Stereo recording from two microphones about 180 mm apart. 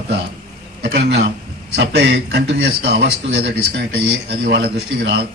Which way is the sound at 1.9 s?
65° right (ahead or behind).